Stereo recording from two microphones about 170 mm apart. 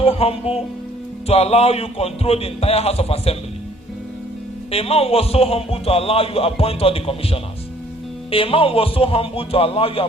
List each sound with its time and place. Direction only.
0.0 s a man's voice: 35° left (ahead or behind)
4.7 s a man's voice: 35° left (ahead or behind)